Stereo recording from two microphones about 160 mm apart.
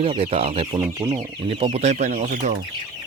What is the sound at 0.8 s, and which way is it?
Speech, 20° right (ahead or behind).